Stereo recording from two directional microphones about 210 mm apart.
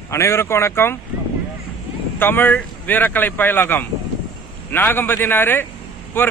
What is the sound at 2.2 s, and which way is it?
Speech, 10° left (ahead or behind).